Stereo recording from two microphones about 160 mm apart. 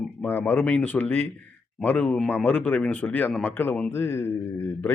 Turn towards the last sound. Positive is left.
turn(degrees=15)  # may be behind; listen again after turning